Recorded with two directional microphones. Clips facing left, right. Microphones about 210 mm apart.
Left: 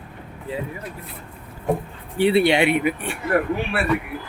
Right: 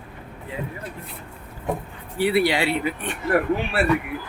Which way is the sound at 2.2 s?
25° left (ahead or behind).